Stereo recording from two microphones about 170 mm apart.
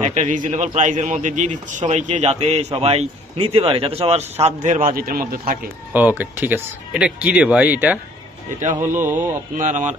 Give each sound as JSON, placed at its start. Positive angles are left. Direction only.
{"t": 0.0, "sound": "a man's voice", "side_deg": -45}
{"t": 5.9, "sound": "speech", "side_deg": -10}
{"t": 9.6, "sound": "a man's voice", "side_deg": -50}